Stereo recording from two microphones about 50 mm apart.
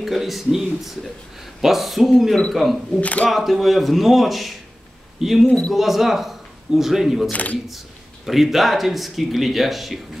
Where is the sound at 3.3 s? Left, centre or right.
Centre.